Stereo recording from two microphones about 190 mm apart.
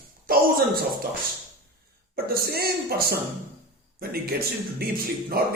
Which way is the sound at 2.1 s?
55° right (ahead or behind).